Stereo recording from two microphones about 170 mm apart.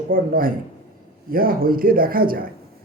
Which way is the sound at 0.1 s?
55° right (ahead or behind).